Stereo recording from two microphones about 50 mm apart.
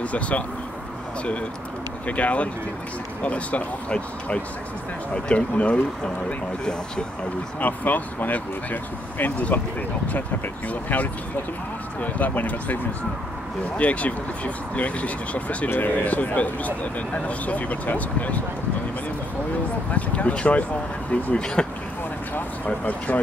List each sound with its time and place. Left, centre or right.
0.0 s speech: left
2.0 s speech: left
7.6 s speech: left
9.4 s speech: left
19.9 s speech: left
21.6 s a sound: centre
22.7 s speech: left